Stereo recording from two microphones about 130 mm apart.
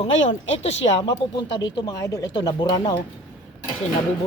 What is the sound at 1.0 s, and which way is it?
Speech, 35° left (ahead or behind).